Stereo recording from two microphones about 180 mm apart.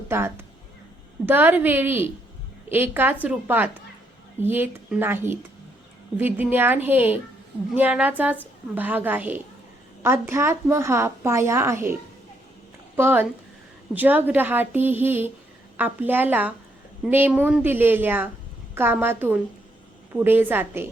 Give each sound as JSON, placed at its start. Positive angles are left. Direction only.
{"t": 0.1, "sound": "a woman's voice", "side_deg": -15}
{"t": 13.0, "sound": "a woman's voice", "side_deg": -10}